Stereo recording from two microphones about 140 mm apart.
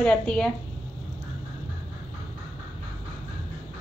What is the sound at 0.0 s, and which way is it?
Speech, 5° left (ahead or behind).